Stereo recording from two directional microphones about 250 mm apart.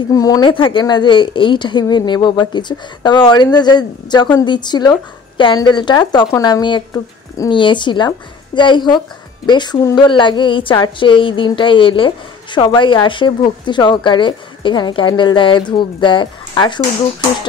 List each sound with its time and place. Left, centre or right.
0.1 s a woman's voice: centre